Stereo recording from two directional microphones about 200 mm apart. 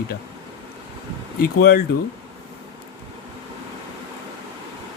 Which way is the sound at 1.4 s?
50° left (ahead or behind).